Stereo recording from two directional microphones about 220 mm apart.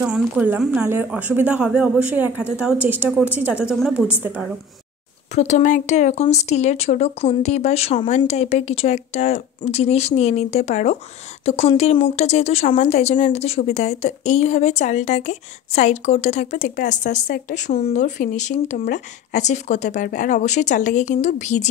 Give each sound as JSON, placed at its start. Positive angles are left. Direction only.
{"t": 0.0, "sound": "a woman's voice", "side_deg": -5}
{"t": 5.3, "sound": "a woman's voice", "side_deg": 30}